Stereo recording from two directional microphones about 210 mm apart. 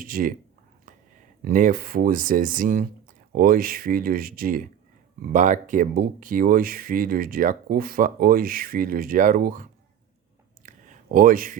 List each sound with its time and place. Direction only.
0.0 s speech: 40° right (ahead or behind)
1.4 s speech: 40° right (ahead or behind)
10.6 s a sound: 40° right (ahead or behind)